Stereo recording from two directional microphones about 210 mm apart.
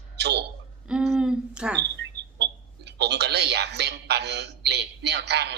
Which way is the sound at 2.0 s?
55° right (ahead or behind).